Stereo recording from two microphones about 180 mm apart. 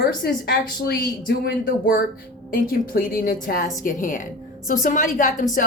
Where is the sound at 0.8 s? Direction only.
60° left (ahead or behind).